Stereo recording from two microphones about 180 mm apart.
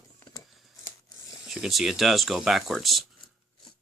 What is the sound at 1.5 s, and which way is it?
Speech, centre (ahead or behind).